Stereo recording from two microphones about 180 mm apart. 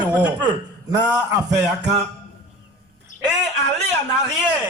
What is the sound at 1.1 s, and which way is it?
Speech, 20° right (ahead or behind).